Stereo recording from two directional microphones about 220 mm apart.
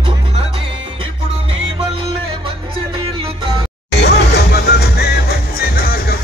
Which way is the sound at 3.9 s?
50° left (ahead or behind).